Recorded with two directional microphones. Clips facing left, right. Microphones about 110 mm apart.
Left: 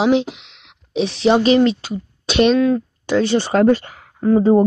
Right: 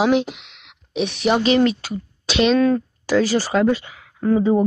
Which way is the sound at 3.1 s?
25° left (ahead or behind).